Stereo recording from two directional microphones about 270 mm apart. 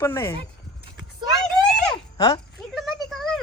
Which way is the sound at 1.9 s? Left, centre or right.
Centre.